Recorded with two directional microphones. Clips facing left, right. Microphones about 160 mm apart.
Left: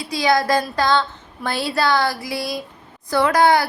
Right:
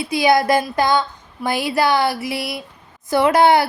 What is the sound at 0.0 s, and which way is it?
A woman's voice, 20° right (ahead or behind).